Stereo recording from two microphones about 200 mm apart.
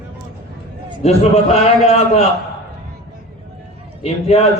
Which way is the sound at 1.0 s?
30° left (ahead or behind).